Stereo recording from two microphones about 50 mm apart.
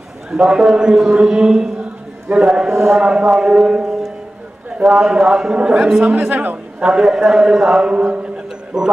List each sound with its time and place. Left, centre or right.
0.3 s a man's voice: centre; by 6.6 s right
6.8 s a man's voice: centre
7.9 s a man's voice: right